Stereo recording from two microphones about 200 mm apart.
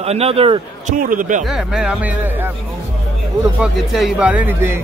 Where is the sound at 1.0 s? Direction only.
40° right (ahead or behind).